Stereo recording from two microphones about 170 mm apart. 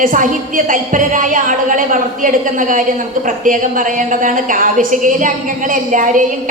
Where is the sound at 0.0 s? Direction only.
50° right (ahead or behind).